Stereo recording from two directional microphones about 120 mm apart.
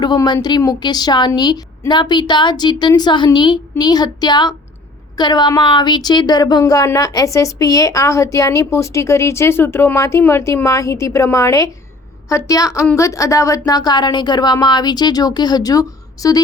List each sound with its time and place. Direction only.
0.4 s speech: 35° left (ahead or behind)